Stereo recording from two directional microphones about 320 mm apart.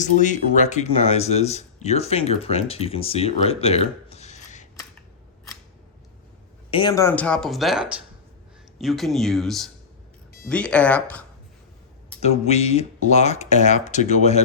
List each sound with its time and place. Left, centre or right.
0.0 s speech: left
6.7 s speech: centre
12.2 s speech: centre